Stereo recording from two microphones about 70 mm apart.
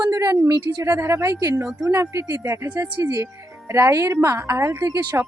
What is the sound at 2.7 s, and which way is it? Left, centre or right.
Speech, right.